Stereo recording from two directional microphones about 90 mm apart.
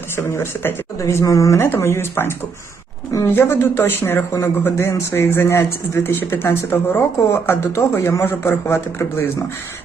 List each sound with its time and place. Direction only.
0.2 s speech: 30° left (ahead or behind)
3.1 s speech: 40° left (ahead or behind)
3.3 s speech: 25° left (ahead or behind)